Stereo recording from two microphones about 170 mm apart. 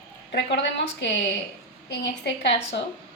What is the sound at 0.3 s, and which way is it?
Speech, 90° left.